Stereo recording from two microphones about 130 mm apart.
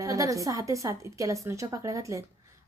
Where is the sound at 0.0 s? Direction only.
25° right (ahead or behind).